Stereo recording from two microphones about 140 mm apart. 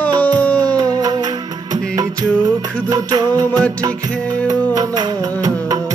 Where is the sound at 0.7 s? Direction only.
25° right (ahead or behind).